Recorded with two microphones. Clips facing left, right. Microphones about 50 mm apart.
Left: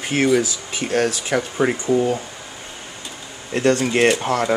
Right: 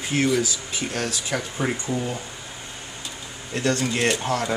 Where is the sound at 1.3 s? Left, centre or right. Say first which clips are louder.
Left 6 dB; left.